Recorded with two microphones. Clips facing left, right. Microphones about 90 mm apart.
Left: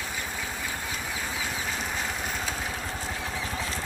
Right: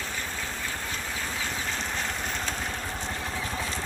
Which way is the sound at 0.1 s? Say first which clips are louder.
Even; 10° left (ahead or behind).